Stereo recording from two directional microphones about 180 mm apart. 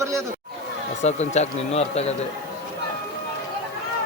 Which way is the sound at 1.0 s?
40° left (ahead or behind).